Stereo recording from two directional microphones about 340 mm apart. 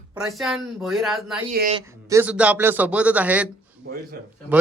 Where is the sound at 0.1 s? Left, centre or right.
Centre.